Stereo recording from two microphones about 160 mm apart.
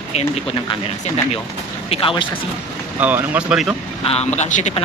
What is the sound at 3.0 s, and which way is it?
Speech, 10° right (ahead or behind).